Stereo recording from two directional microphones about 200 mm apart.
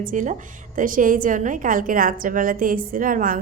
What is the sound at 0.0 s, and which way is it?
Speech, 40° right (ahead or behind).